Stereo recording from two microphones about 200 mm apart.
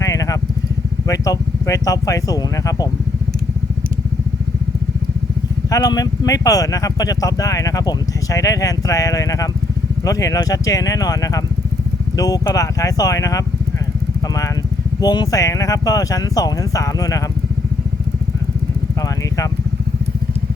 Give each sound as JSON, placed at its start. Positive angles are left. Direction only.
{"t": 0.0, "sound": "vehicle", "side_deg": 15}
{"t": 1.0, "sound": "speech", "side_deg": 15}
{"t": 5.7, "sound": "speech", "side_deg": 20}
{"t": 15.0, "sound": "speech", "side_deg": 20}